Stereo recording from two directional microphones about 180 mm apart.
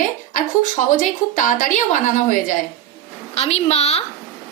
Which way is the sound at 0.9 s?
45° left (ahead or behind).